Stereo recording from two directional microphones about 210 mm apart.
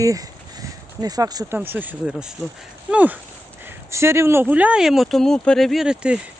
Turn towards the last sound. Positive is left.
turn(degrees=-5)  # may be behind; listen again after turning